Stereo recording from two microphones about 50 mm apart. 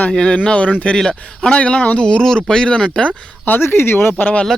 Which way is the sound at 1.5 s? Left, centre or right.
Left.